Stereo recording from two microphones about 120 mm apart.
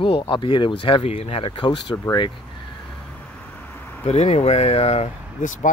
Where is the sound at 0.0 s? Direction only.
45° left (ahead or behind).